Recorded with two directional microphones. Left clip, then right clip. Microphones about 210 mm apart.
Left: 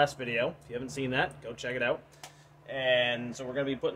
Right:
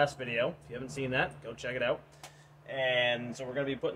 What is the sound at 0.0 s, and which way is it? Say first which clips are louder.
Speech: left 2 dB; 20° left (ahead or behind).